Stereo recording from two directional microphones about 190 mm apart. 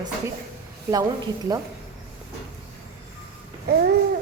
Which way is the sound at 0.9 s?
10° right (ahead or behind).